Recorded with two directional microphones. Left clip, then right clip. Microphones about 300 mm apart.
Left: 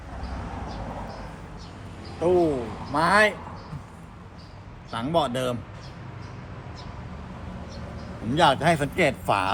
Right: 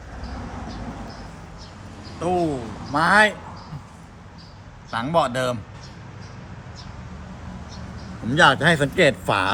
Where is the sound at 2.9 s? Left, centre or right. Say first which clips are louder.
Right 3 dB; right.